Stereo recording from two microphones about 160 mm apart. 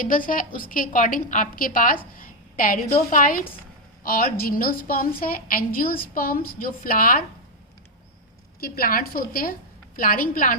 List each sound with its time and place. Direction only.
0.0 s a woman's voice: 60° left (ahead or behind)
8.6 s a woman's voice: 70° left (ahead or behind)